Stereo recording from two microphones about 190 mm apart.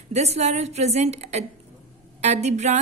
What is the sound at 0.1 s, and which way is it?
A woman's voice, 35° right (ahead or behind).